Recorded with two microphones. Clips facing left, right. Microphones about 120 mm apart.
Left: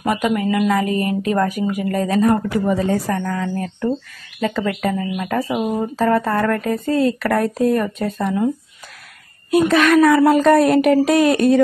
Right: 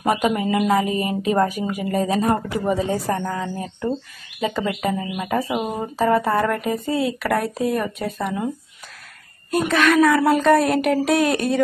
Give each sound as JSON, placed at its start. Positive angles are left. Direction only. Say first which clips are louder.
{"t": 0.0, "sound": "speech", "louder": "left 1 dB", "side_deg": -20}
{"t": 7.0, "sound": "speech", "louder": "left 6 dB", "side_deg": -5}
{"t": 9.5, "sound": "speech", "louder": "left 4 dB", "side_deg": 0}